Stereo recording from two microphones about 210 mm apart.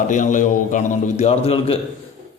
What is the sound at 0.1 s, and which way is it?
A man's voice, 35° left (ahead or behind).